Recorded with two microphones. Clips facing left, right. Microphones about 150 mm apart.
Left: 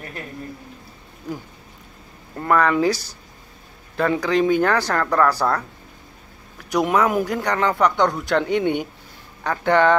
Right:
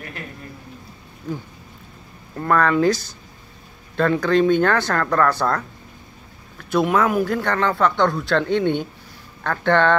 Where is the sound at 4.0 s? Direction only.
10° left (ahead or behind).